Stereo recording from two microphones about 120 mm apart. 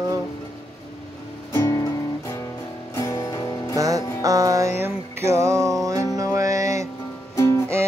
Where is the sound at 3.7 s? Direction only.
30° right (ahead or behind).